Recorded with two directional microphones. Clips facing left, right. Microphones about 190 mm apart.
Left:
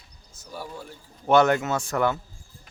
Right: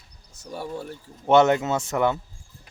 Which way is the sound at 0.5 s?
25° right (ahead or behind).